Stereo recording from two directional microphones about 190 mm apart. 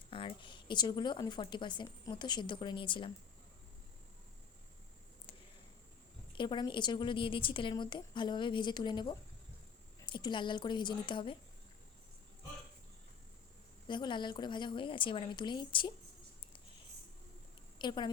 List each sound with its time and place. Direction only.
0.1 s speech: 25° left (ahead or behind)
6.3 s speech: 25° left (ahead or behind)
13.8 s speech: 25° left (ahead or behind)
17.7 s a woman's voice: 25° left (ahead or behind)